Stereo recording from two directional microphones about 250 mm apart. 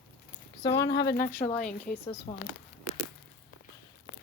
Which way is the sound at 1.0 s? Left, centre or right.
Left.